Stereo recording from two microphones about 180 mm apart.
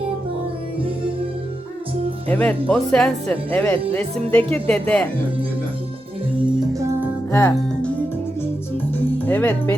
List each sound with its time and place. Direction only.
2.2 s speech: 10° left (ahead or behind)
6.7 s music: 15° right (ahead or behind)
7.3 s music: 15° left (ahead or behind)
9.1 s speech: 10° left (ahead or behind)